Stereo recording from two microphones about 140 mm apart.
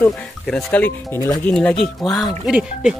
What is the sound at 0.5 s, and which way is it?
Speech, 5° left (ahead or behind).